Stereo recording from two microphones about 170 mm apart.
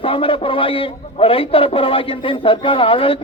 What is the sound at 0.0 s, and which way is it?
A man's voice, 30° left (ahead or behind).